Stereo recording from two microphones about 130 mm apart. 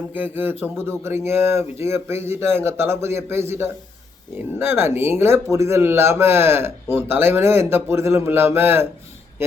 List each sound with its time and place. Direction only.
0.1 s a man's voice: 15° right (ahead or behind)